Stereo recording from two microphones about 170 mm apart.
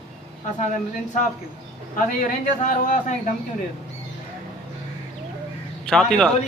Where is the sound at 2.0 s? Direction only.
50° left (ahead or behind).